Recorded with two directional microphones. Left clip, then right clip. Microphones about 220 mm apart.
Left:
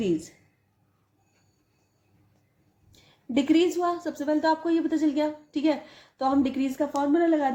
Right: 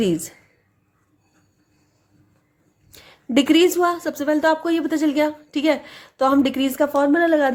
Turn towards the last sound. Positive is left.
turn(degrees=-40)  # may be behind; listen again after turning